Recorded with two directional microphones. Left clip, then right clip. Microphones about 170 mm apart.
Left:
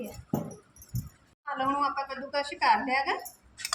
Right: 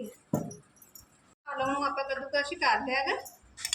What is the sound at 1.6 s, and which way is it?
Dishes, 20° left (ahead or behind).